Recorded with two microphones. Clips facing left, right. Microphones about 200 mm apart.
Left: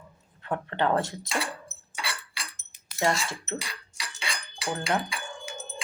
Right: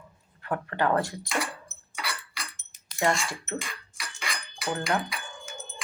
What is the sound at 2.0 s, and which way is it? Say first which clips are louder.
Chink: even; 30° left (ahead or behind).